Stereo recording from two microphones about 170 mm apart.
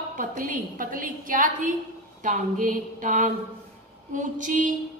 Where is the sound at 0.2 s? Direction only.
50° right (ahead or behind).